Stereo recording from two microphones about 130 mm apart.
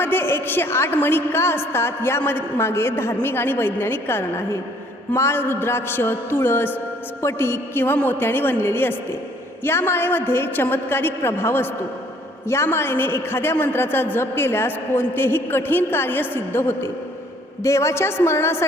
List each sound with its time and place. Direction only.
0.0 s a man's voice: 15° left (ahead or behind)